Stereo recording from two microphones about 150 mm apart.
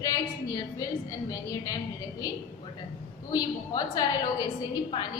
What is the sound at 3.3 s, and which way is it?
A woman's voice, 25° left (ahead or behind).